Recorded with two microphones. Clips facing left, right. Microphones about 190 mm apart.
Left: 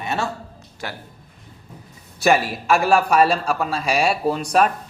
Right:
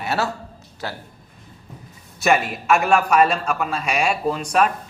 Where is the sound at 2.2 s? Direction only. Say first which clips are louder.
Left 1 dB; 35° left (ahead or behind).